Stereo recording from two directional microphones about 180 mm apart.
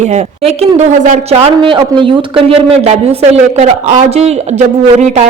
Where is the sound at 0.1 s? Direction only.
35° right (ahead or behind).